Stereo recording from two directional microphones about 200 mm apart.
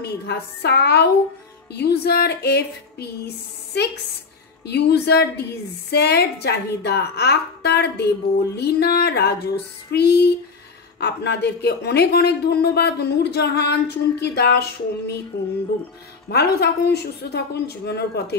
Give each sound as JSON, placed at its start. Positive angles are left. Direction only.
{"t": 0.0, "sound": "speech", "side_deg": 55}
{"t": 16.3, "sound": "a woman's voice", "side_deg": 55}